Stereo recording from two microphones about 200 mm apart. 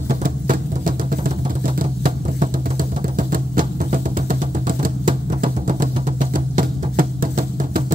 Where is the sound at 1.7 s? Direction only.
45° right (ahead or behind).